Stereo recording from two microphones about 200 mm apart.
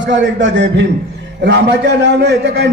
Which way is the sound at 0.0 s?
60° right (ahead or behind).